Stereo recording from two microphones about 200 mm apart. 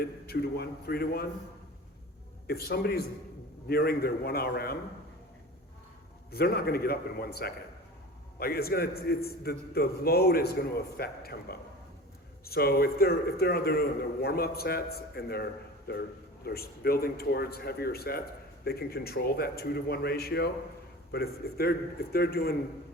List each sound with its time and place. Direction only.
0.0 s a man's voice: 50° left (ahead or behind)
2.5 s a man's voice: 50° left (ahead or behind)
6.3 s a man's voice: 50° left (ahead or behind)